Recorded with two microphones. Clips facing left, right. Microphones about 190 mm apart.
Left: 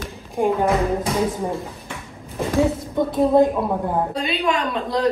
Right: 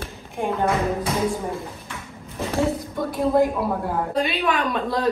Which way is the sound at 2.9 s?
20° left (ahead or behind).